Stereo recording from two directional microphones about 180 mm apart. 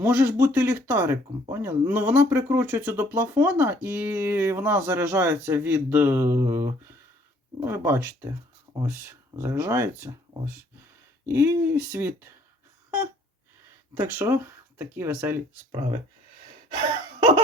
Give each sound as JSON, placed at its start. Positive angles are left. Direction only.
{"t": 0.0, "sound": "speech", "side_deg": -15}
{"t": 13.9, "sound": "speech", "side_deg": -15}
{"t": 16.7, "sound": "gasp", "side_deg": -25}